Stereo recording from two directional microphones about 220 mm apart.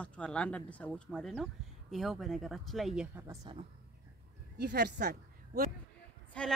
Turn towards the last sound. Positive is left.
turn(degrees=5)  # may be behind; listen again after turning